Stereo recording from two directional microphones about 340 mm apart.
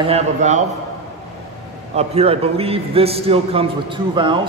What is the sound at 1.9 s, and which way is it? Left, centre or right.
A man's voice, centre.